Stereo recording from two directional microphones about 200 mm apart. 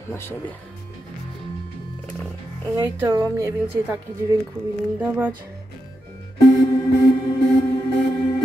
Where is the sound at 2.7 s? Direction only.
15° right (ahead or behind).